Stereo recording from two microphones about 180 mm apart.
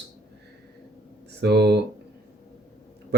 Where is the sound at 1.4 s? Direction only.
70° right (ahead or behind).